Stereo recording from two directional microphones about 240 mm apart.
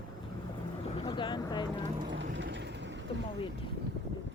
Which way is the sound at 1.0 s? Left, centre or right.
Centre.